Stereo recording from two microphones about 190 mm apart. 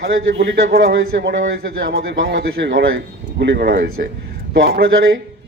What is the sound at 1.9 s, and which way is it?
A man's voice, 85° right.